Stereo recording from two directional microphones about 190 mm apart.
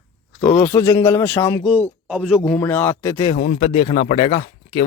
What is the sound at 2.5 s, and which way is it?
Speech, 10° left (ahead or behind).